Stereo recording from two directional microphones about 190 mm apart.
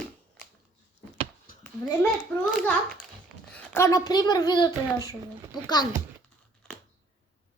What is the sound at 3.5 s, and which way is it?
A child's voice, 15° left (ahead or behind).